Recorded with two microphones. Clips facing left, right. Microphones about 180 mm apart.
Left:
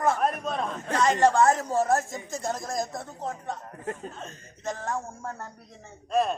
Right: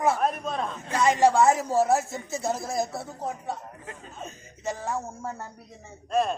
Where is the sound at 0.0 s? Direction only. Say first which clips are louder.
Even; 5° right (ahead or behind).